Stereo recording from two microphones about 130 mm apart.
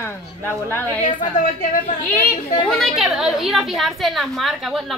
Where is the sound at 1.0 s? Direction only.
90° left.